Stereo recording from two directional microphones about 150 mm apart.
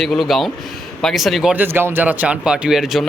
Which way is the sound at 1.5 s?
15° right (ahead or behind).